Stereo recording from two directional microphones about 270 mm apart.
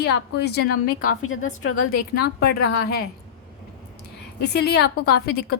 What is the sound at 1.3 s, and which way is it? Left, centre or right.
Speech, left.